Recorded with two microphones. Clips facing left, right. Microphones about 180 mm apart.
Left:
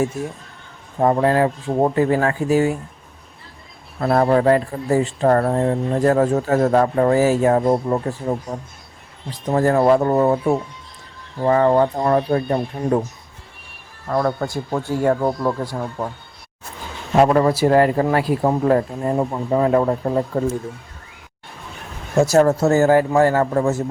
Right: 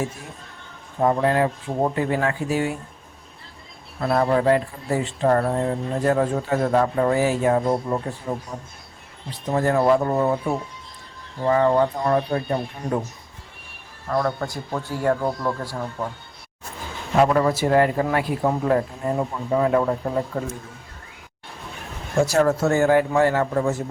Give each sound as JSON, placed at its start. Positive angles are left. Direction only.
{"t": 0.9, "sound": "speech", "side_deg": 40}
{"t": 4.0, "sound": "speech", "side_deg": 50}
{"t": 11.4, "sound": "speech", "side_deg": 45}
{"t": 14.1, "sound": "a man's voice", "side_deg": 30}
{"t": 17.2, "sound": "speech", "side_deg": 40}
{"t": 22.2, "sound": "speech", "side_deg": 40}